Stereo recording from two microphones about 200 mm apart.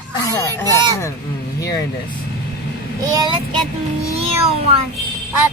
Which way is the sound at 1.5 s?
15° left (ahead or behind).